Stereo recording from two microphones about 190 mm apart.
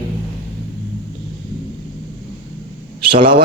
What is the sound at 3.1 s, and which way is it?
Speech, 25° right (ahead or behind).